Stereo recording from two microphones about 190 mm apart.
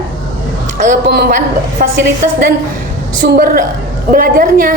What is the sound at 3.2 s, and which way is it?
A woman's voice, 55° right (ahead or behind).